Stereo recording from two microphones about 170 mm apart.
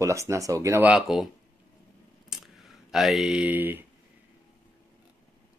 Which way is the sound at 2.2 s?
Centre (ahead or behind).